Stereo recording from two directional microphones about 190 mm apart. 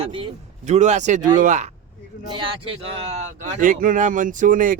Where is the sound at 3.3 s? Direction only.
40° right (ahead or behind).